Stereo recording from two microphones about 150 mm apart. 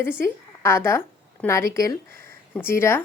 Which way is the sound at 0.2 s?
15° left (ahead or behind).